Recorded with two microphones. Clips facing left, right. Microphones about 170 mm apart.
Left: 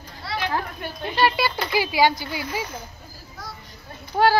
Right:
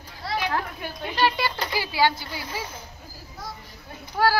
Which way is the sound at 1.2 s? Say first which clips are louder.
Left 2 dB; 10° left (ahead or behind).